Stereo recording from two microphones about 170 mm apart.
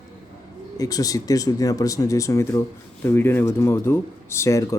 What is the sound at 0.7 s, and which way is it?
Speech, 20° left (ahead or behind).